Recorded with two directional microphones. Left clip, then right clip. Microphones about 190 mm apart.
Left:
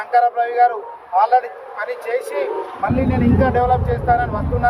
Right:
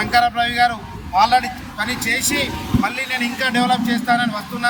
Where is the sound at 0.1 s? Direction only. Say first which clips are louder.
Left 2 dB; 20° right (ahead or behind).